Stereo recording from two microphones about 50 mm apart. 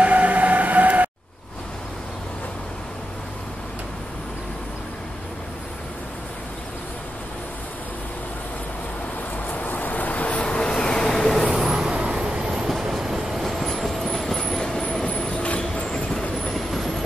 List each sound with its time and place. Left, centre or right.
0.0 s train: right
9.5 s vehicle: left; by 11.5 s centre
11.5 s vehicle: centre; by 15.9 s left
15.9 s vehicle: centre
16.5 s vehicle: centre